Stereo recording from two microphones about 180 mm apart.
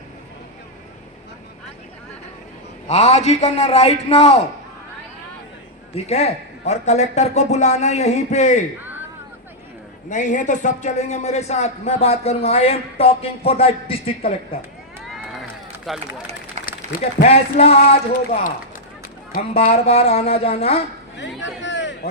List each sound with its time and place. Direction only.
2.8 s a man's voice: 35° left (ahead or behind)
5.9 s a man's voice: 35° left (ahead or behind)
10.1 s a man's voice: 45° left (ahead or behind)
15.0 s run: centre (ahead or behind)
15.9 s speech: centre (ahead or behind)
16.6 s a sound: 40° right (ahead or behind)
16.9 s speech: 55° left (ahead or behind)
17.2 s a man's voice: 35° left (ahead or behind)
19.3 s a man's voice: 45° left (ahead or behind)
21.2 s a sound: 90° left